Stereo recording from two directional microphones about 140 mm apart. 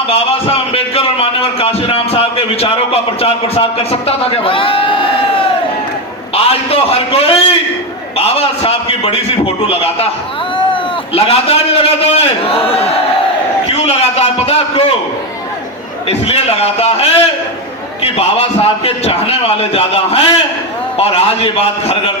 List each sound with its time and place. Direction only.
0.1 s a man's voice: 45° left (ahead or behind)
16.0 s a man's voice: 45° left (ahead or behind)